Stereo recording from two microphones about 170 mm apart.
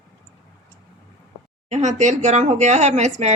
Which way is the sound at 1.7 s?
45° right (ahead or behind).